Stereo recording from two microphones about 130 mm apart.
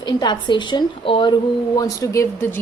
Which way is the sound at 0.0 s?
35° left (ahead or behind).